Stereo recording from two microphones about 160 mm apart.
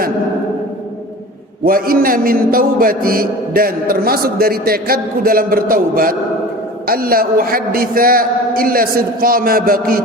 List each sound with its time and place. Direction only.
1.6 s a man's voice: 65° right (ahead or behind)